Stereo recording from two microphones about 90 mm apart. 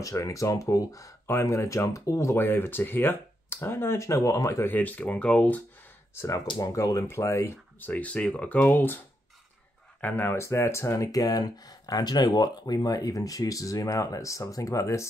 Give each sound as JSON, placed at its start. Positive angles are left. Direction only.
{"t": 0.0, "sound": "speech", "side_deg": 35}
{"t": 4.6, "sound": "speech", "side_deg": 20}
{"t": 6.1, "sound": "speech", "side_deg": 35}
{"t": 7.8, "sound": "speech", "side_deg": 15}
{"t": 10.0, "sound": "speech", "side_deg": 20}